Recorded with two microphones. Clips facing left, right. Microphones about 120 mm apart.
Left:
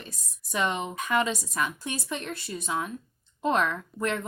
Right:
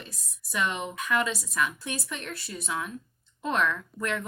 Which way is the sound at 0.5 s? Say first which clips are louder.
Left 2 dB; 30° left (ahead or behind).